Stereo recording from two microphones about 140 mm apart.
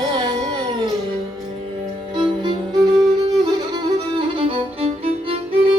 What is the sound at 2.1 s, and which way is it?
Music, 35° right (ahead or behind).